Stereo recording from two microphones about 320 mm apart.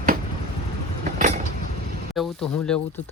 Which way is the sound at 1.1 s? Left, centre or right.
Right.